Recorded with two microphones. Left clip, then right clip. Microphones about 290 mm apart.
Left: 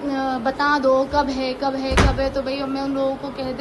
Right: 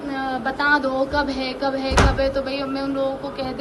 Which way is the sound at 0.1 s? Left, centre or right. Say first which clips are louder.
Left 2 dB; left.